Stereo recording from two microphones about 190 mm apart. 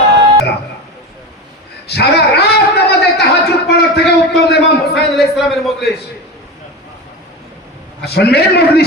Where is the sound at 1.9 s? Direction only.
60° left (ahead or behind).